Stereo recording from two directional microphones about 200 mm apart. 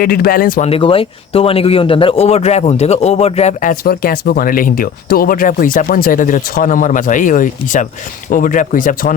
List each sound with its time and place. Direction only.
0.0 s speech: 45° left (ahead or behind)
0.7 s speech: 25° left (ahead or behind)